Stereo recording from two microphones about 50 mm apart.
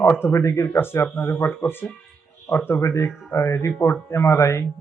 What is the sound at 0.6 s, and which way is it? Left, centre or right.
Speech, left.